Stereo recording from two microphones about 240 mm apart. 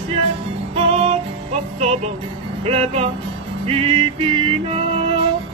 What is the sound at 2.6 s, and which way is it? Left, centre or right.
Music, right.